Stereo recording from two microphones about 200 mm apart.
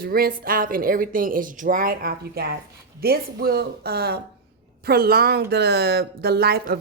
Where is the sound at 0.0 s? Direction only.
45° right (ahead or behind).